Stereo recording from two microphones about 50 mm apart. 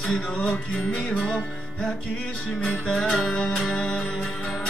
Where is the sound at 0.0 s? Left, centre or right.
Centre.